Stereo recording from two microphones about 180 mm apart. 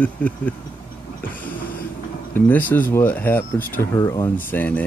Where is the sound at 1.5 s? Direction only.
50° left (ahead or behind).